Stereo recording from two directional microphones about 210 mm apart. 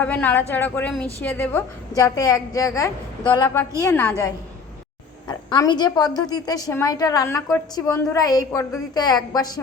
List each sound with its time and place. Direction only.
0.0 s a woman's voice: 5° left (ahead or behind)
5.3 s a woman's voice: 20° left (ahead or behind)